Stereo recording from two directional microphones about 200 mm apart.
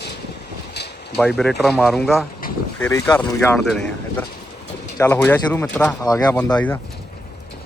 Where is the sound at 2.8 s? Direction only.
15° left (ahead or behind).